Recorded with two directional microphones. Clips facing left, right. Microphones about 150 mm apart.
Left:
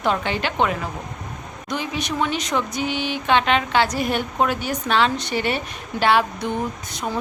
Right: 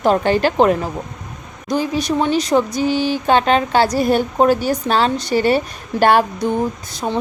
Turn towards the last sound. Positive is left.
turn(degrees=-35)  # may be behind; listen again after turning